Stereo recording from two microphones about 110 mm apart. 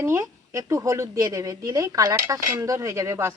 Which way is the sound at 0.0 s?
25° right (ahead or behind).